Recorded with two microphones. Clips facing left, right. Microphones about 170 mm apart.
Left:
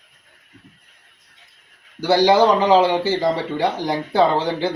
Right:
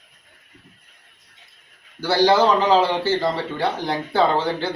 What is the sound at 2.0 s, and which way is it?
A man's voice, 15° left (ahead or behind).